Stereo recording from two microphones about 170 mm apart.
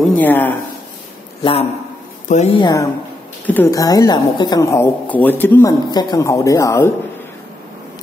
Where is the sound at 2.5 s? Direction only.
25° left (ahead or behind).